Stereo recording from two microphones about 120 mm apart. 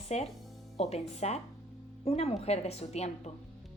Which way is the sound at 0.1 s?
65° left (ahead or behind).